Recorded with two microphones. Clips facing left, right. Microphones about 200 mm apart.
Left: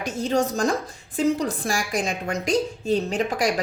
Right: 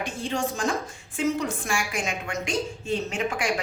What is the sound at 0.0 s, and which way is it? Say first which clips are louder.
A woman's voice: left 5 dB; 40° left (ahead or behind).